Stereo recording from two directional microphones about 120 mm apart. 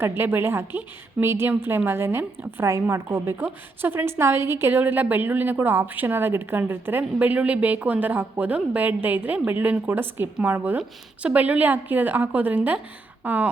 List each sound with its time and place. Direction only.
0.2 s a woman's voice: 20° right (ahead or behind)